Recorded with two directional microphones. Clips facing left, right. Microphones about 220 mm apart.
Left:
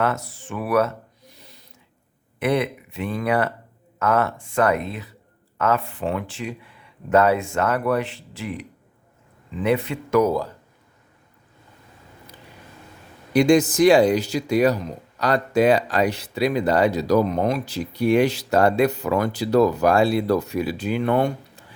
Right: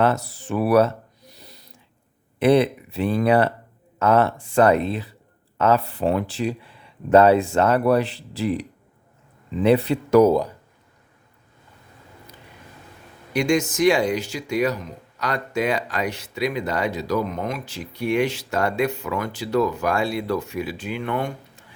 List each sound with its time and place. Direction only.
0.0 s a sound: 35° right (ahead or behind)
2.4 s speech: 30° right (ahead or behind)
9.6 s speech: 35° right (ahead or behind)
13.3 s speech: 35° left (ahead or behind)